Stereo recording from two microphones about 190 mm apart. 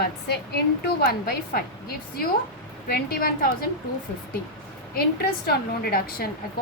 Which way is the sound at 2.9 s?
55° left (ahead or behind).